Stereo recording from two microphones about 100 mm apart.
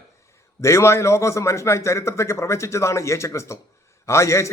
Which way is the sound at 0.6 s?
30° left (ahead or behind).